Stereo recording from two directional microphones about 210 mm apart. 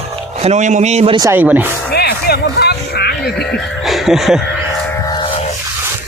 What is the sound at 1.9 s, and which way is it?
Music, 50° left (ahead or behind).